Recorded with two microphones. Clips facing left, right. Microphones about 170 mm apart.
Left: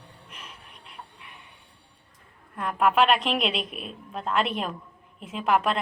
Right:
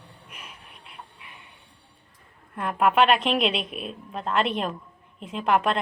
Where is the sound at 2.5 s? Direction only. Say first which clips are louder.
Right 1 dB; centre (ahead or behind).